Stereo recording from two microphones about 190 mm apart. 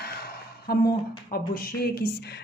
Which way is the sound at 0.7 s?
55° left (ahead or behind).